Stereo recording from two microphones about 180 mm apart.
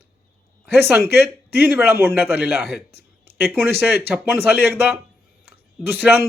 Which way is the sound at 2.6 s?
65° left (ahead or behind).